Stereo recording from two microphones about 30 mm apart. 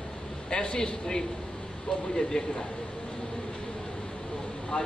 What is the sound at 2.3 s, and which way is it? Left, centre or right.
Speech, left.